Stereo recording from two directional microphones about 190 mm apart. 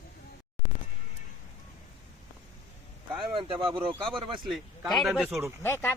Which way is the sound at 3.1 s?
25° right (ahead or behind).